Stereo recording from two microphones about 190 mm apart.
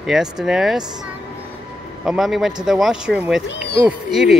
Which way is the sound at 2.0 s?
Centre (ahead or behind).